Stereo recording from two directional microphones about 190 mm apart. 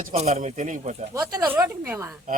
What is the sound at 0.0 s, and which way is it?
Speech, 35° right (ahead or behind).